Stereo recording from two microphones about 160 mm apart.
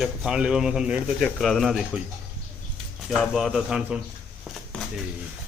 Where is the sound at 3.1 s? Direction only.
Centre (ahead or behind).